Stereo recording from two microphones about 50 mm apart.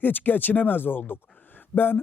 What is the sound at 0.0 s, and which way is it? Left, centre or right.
Speech, left.